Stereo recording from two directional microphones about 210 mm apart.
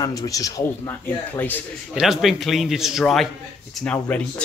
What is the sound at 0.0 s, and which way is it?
Speech, 15° left (ahead or behind).